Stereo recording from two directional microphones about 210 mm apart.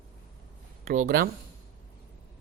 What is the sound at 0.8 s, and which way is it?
Speech, 35° right (ahead or behind).